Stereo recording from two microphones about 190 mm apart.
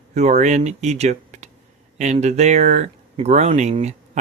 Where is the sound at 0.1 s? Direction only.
35° right (ahead or behind).